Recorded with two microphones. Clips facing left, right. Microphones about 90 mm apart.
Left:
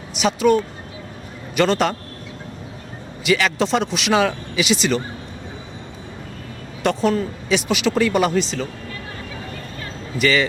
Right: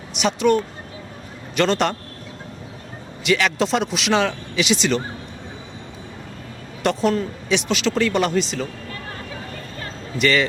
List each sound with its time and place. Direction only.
0.1 s speech: centre (ahead or behind)
3.2 s speech: centre (ahead or behind)
6.8 s speech: centre (ahead or behind)
10.2 s speech: centre (ahead or behind)